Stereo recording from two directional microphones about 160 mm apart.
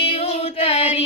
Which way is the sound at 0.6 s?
40° left (ahead or behind).